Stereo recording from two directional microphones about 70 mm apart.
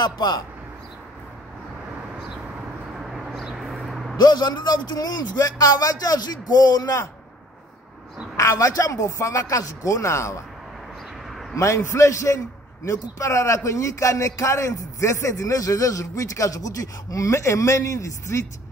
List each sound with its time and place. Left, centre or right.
0.0 s a man's voice: left
3.0 s a sound: centre
4.2 s a man's voice: left
8.4 s a man's voice: left
11.5 s a man's voice: left